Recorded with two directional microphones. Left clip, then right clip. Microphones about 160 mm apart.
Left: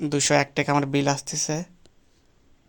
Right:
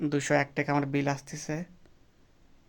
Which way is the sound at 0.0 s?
20° left (ahead or behind).